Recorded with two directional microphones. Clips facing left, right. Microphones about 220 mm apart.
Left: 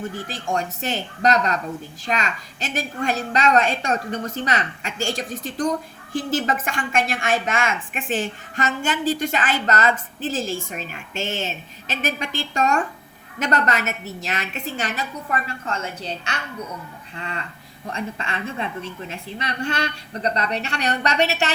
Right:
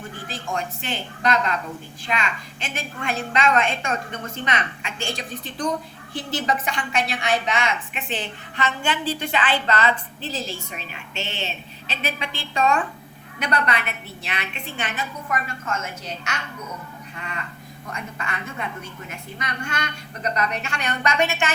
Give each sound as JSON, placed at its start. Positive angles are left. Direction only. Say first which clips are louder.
{"t": 0.0, "sound": "a woman's voice", "louder": "left 4 dB", "side_deg": 40}